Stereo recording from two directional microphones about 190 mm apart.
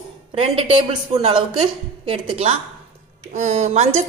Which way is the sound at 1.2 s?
30° right (ahead or behind).